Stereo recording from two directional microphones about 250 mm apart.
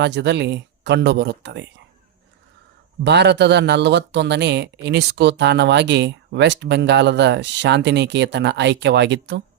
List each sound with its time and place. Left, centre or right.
0.0 s a man's voice: right
3.0 s a man's voice: right